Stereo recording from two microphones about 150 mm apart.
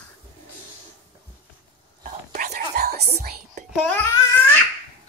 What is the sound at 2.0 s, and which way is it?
Whispering, 60° right (ahead or behind).